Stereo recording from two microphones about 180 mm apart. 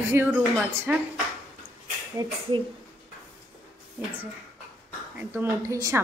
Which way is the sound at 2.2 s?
20° right (ahead or behind).